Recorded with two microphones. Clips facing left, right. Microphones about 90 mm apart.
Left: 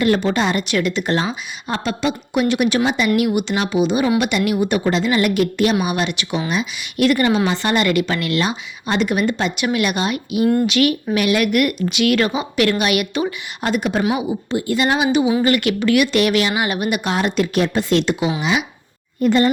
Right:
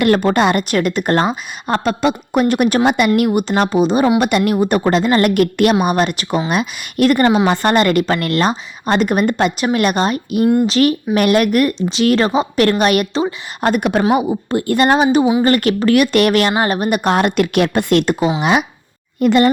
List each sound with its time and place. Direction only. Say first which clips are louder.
0.0 s a woman's voice: right 4 dB; 50° right (ahead or behind)
3.2 s a woman's voice: right 4 dB; 45° right (ahead or behind)
5.8 s a woman's voice: right 5 dB; 45° right (ahead or behind)
13.6 s a woman's voice: right 4 dB; 50° right (ahead or behind)
16.5 s a woman's voice: right 4 dB; 40° right (ahead or behind)
19.2 s a woman's voice: right 3 dB; 75° right (ahead or behind)